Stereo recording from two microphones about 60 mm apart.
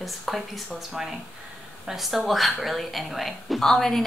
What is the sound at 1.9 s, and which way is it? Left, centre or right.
A woman's voice, centre.